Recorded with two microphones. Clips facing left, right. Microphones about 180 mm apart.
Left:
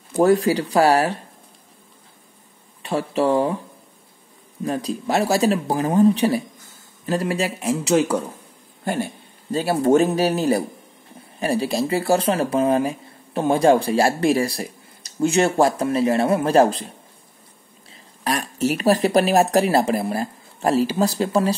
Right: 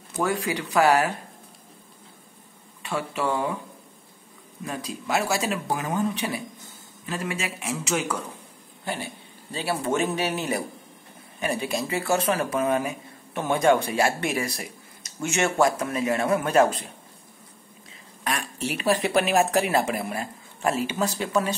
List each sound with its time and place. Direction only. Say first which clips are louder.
0.1 s speech: left 10 dB; 35° left (ahead or behind)
2.8 s speech: left 7 dB; 35° left (ahead or behind)
4.6 s speech: left 7 dB; 35° left (ahead or behind)
8.8 s a man's voice: left 8 dB; 45° left (ahead or behind)
18.2 s speech: left 7 dB; 40° left (ahead or behind)